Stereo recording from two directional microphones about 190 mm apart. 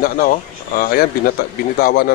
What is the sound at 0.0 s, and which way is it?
Speech, 50° left (ahead or behind).